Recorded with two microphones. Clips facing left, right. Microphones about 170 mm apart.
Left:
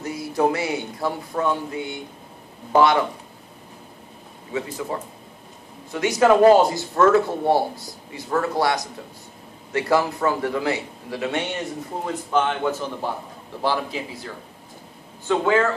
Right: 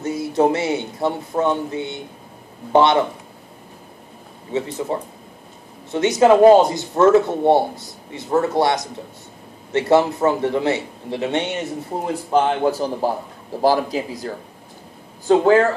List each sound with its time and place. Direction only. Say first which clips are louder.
0.0 s speech: right 4 dB; 25° right (ahead or behind)
4.5 s speech: right 4 dB; 25° right (ahead or behind)
12.1 s a man's voice: right 4 dB; 35° right (ahead or behind)